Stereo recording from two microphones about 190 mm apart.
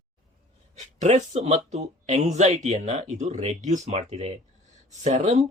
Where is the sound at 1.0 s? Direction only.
35° right (ahead or behind).